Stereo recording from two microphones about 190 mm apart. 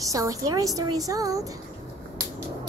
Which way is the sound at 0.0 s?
15° right (ahead or behind).